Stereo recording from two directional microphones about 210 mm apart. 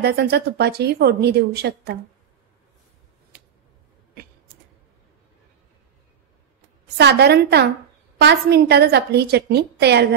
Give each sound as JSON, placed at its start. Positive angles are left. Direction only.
{"t": 0.0, "sound": "speech", "side_deg": -50}
{"t": 7.0, "sound": "speech", "side_deg": -50}